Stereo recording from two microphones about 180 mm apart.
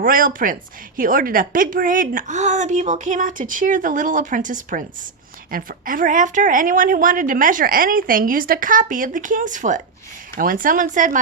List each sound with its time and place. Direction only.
0.0 s a woman's voice: 50° right (ahead or behind)